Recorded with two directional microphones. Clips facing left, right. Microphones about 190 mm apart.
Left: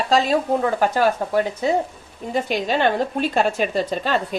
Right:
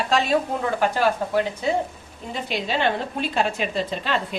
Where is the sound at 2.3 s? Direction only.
50° left (ahead or behind).